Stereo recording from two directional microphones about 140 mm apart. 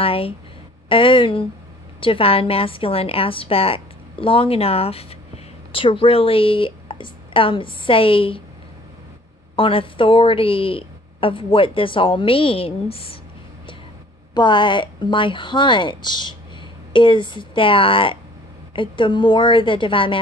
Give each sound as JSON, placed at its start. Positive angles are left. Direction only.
{"t": 0.0, "sound": "a woman's voice", "side_deg": 40}
{"t": 9.6, "sound": "a woman's voice", "side_deg": 40}
{"t": 14.3, "sound": "a woman's voice", "side_deg": 35}